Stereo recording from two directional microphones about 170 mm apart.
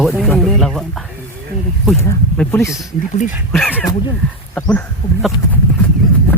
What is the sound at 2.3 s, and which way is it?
Speech, 10° left (ahead or behind).